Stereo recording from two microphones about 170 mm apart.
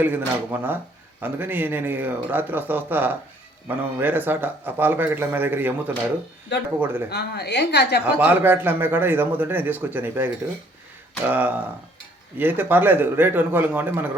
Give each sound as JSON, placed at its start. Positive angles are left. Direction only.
{"t": 0.0, "sound": "a man's voice", "side_deg": -10}
{"t": 6.7, "sound": "a man's voice", "side_deg": -10}
{"t": 7.1, "sound": "a woman's voice", "side_deg": 75}
{"t": 8.0, "sound": "a man's voice", "side_deg": -10}